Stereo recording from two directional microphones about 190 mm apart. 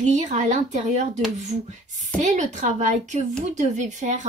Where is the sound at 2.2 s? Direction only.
40° right (ahead or behind).